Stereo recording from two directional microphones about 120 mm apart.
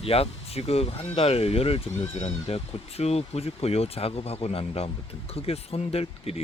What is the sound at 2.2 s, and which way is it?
Speech, 70° left (ahead or behind).